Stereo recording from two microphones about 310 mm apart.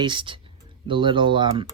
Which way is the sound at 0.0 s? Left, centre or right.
Centre.